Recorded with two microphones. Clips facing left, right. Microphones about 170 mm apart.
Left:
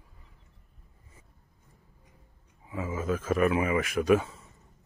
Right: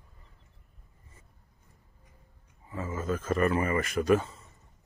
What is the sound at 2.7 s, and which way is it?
Speech, 5° left (ahead or behind).